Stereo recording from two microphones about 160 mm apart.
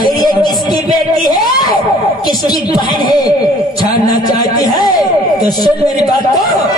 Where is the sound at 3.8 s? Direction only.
25° left (ahead or behind).